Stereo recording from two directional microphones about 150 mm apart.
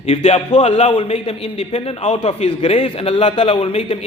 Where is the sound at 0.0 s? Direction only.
45° left (ahead or behind).